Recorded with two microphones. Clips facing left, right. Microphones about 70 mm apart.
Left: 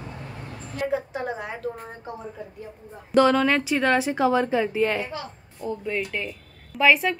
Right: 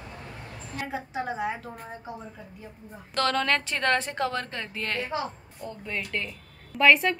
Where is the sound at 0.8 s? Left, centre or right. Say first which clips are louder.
Left 6 dB; centre.